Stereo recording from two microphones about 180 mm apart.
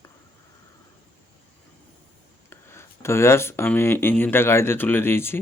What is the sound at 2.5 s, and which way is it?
Speech, 15° left (ahead or behind).